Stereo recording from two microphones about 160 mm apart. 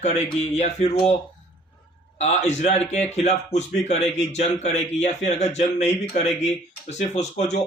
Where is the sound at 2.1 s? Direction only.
45° left (ahead or behind).